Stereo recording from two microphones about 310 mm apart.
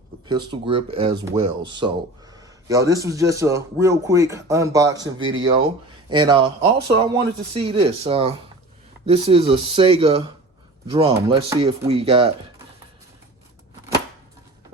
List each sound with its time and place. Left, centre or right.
0.3 s a man's voice: centre